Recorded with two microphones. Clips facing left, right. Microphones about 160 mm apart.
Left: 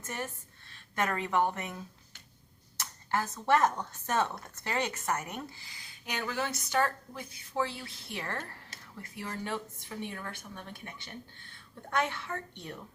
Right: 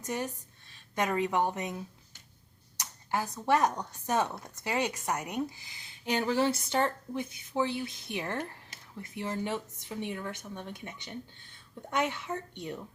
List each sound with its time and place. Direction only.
0.0 s a woman's voice: 15° right (ahead or behind)